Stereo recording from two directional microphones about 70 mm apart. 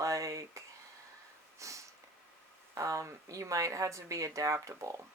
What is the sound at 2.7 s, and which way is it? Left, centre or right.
Speech, right.